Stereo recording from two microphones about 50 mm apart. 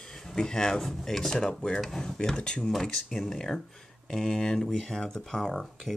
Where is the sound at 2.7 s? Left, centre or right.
Centre.